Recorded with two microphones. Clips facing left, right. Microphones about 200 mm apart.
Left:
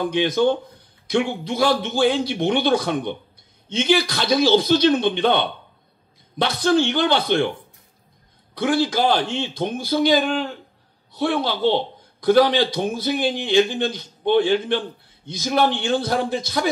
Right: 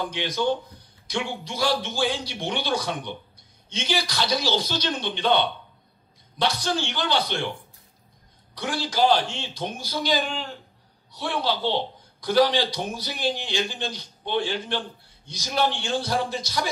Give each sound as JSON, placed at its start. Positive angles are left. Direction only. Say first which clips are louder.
{"t": 0.0, "sound": "a man's voice", "louder": "left 7 dB", "side_deg": 55}
{"t": 8.5, "sound": "a man's voice", "louder": "left 5 dB", "side_deg": 55}